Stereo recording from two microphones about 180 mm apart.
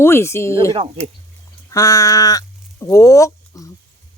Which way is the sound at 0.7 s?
30° right (ahead or behind).